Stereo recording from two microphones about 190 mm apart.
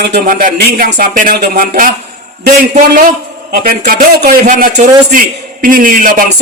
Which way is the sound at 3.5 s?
50° right (ahead or behind).